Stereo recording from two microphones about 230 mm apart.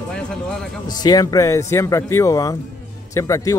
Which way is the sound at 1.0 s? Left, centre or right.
Centre.